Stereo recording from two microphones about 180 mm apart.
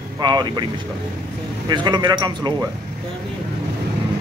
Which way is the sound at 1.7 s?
25° right (ahead or behind).